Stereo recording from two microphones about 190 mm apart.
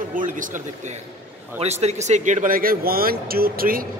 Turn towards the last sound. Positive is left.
turn(degrees=-50)  # may be behind; listen again after turning